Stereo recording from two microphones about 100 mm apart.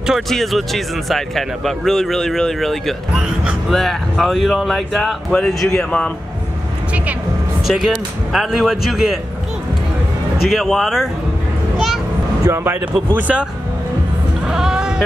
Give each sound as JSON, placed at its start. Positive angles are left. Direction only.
{"t": 0.0, "sound": "speech", "side_deg": 0}
{"t": 7.6, "sound": "speech", "side_deg": -5}
{"t": 10.5, "sound": "speech", "side_deg": 0}
{"t": 11.7, "sound": "a sound", "side_deg": 0}
{"t": 12.4, "sound": "speech", "side_deg": -25}
{"t": 13.1, "sound": "speech", "side_deg": -15}
{"t": 14.4, "sound": "bleat", "side_deg": -5}